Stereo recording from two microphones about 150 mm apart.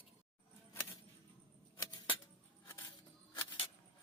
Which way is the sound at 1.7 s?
30° left (ahead or behind).